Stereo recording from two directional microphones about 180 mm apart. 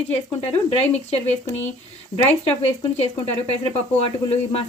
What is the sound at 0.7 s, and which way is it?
Speech, 35° left (ahead or behind).